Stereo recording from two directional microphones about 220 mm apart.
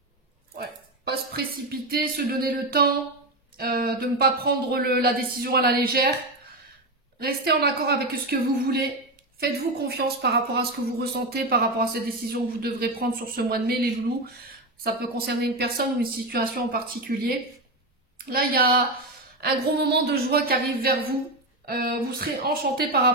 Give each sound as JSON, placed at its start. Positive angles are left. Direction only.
{"t": 0.6, "sound": "a woman's voice", "side_deg": -45}
{"t": 7.2, "sound": "a woman's voice", "side_deg": -45}